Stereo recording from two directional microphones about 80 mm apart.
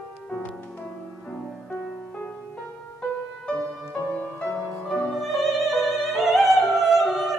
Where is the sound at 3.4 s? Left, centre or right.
Centre.